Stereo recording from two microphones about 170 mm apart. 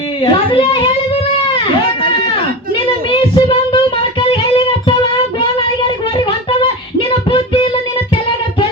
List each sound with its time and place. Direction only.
0.2 s speech: 30° left (ahead or behind)
3.1 s child singing: 30° left (ahead or behind)
7.1 s child singing: 30° left (ahead or behind)